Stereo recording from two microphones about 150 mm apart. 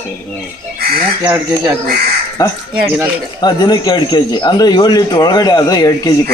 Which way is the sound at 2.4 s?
25° left (ahead or behind).